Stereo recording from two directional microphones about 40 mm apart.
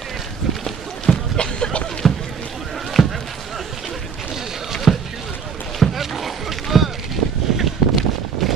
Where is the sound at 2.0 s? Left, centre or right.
Centre.